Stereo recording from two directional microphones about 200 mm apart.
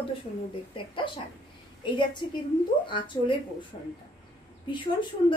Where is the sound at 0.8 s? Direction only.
25° left (ahead or behind).